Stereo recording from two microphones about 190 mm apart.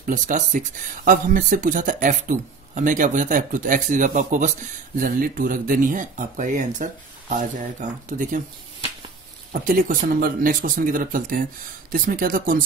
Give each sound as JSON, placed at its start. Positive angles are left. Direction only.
{"t": 0.0, "sound": "speech", "side_deg": -45}
{"t": 9.5, "sound": "speech", "side_deg": -45}